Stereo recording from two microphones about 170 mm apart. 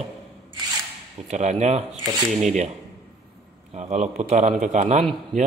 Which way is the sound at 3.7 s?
40° right (ahead or behind).